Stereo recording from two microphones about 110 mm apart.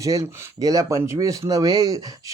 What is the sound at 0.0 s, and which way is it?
Speech, 30° right (ahead or behind).